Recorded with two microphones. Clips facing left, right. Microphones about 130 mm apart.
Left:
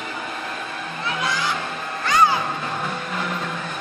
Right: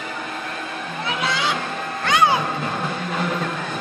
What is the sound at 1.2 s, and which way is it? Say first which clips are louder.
Music: right 2 dB; 70° right (ahead or behind).